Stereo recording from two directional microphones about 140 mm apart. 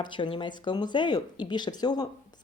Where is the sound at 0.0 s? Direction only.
35° left (ahead or behind).